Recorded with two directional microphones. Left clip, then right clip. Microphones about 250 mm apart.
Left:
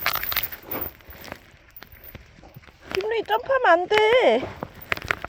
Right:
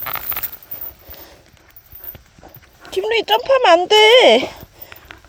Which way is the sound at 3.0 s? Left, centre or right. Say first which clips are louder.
Right 9 dB; right.